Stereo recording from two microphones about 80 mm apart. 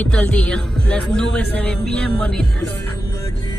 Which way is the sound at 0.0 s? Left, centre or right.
Centre.